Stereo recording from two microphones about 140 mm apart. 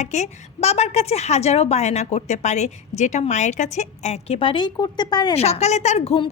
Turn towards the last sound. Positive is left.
turn(degrees=45)  # may be behind; listen again after turning